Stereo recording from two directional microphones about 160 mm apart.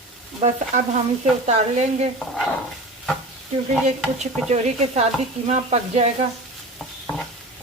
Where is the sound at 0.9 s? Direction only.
45° right (ahead or behind).